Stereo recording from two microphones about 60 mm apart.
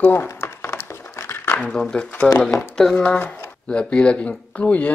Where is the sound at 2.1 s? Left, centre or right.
Left.